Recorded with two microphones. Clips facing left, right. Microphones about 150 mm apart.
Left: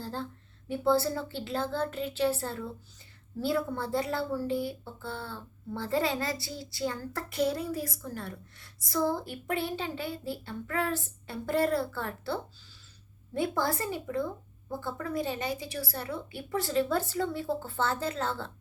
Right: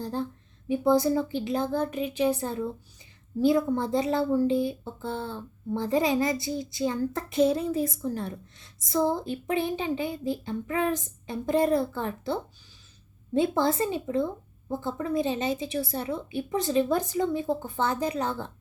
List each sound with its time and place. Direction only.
0.0 s a woman's voice: 15° right (ahead or behind)